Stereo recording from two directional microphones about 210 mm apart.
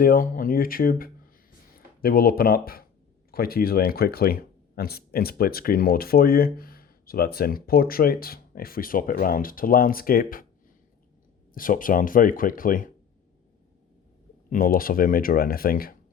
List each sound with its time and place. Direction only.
0.0 s speech: 45° left (ahead or behind)
11.5 s speech: 40° left (ahead or behind)
14.5 s speech: 45° left (ahead or behind)